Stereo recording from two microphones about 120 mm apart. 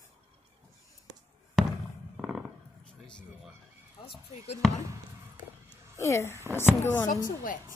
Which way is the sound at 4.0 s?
50° left (ahead or behind).